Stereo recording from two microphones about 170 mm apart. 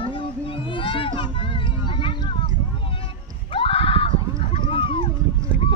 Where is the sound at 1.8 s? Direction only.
30° left (ahead or behind).